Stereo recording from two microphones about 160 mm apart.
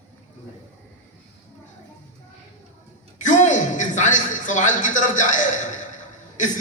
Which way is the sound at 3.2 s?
50° left (ahead or behind).